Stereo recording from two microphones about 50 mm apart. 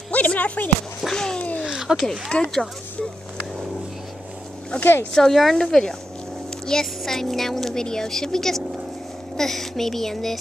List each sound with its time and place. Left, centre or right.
0.1 s speech: left
1.1 s a woman's voice: centre
1.6 s a sound: centre
2.0 s a woman's voice: centre
4.7 s speech: left
5.1 s a woman's voice: centre